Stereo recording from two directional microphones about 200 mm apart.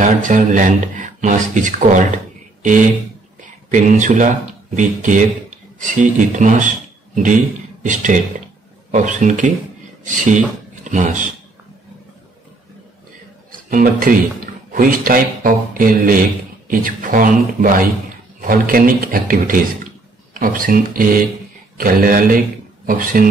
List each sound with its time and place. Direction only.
0.0 s speech: 40° right (ahead or behind)
7.8 s speech: 40° right (ahead or behind)
13.7 s speech: 45° right (ahead or behind)